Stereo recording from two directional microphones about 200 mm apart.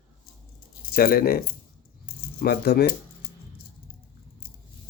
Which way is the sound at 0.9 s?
45° left (ahead or behind).